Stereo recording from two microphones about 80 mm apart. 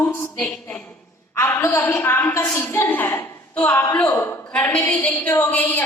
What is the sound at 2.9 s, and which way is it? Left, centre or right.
Speech, left.